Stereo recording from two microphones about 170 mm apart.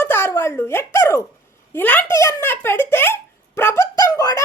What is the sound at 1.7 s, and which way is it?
A woman's voice, 10° left (ahead or behind).